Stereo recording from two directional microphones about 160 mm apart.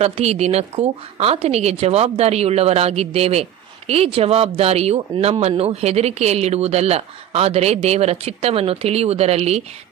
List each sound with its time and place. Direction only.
0.0 s a woman's voice: 40° right (ahead or behind)